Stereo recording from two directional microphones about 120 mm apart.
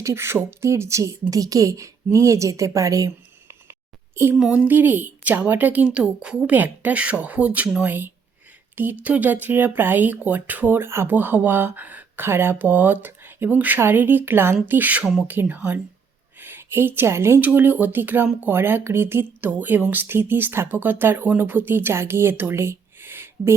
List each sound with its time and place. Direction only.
0.0 s a woman's voice: 20° right (ahead or behind)
3.7 s a sound: 20° right (ahead or behind)
4.4 s speech: 10° right (ahead or behind)